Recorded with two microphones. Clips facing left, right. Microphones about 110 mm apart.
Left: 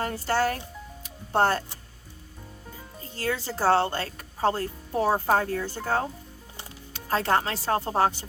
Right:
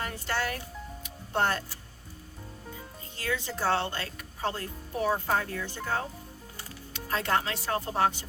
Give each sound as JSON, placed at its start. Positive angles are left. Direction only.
{"t": 0.0, "sound": "speech", "side_deg": 35}
{"t": 3.0, "sound": "speech", "side_deg": 35}